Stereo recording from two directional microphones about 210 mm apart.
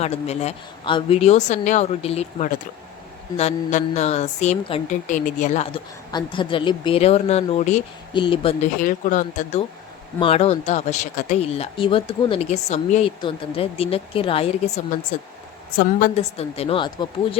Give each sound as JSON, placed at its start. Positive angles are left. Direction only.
{"t": 0.0, "sound": "a woman's voice", "side_deg": 30}
{"t": 6.1, "sound": "speech", "side_deg": 20}
{"t": 8.8, "sound": "a woman's voice", "side_deg": 40}
{"t": 16.1, "sound": "speech", "side_deg": 30}